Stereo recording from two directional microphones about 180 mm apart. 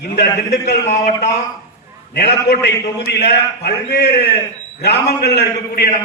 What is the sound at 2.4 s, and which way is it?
A man's voice, 70° left (ahead or behind).